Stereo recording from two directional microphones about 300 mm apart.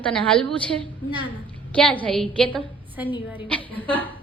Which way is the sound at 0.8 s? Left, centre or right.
Centre.